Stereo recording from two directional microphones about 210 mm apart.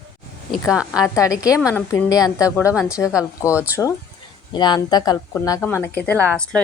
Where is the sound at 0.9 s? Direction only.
15° left (ahead or behind).